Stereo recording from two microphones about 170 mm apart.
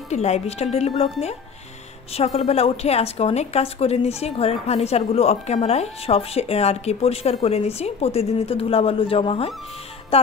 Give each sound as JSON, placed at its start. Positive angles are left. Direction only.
{"t": 0.1, "sound": "a woman's voice", "side_deg": 40}
{"t": 2.1, "sound": "a woman's voice", "side_deg": 35}